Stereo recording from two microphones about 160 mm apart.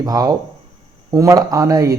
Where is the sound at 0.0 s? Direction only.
25° right (ahead or behind).